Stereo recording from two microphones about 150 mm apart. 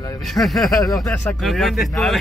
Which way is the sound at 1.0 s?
15° left (ahead or behind).